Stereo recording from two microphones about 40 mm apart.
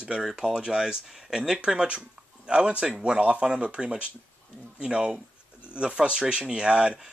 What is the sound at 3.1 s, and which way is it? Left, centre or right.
Speech, right.